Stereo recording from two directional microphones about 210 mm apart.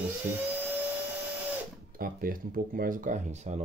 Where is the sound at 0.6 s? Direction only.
10° right (ahead or behind).